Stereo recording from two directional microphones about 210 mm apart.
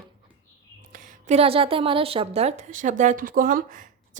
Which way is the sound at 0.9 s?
30° right (ahead or behind).